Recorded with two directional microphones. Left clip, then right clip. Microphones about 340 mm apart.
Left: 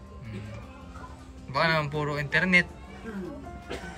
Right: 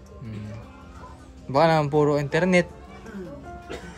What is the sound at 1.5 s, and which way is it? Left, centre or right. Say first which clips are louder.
Speech: right 7 dB; centre.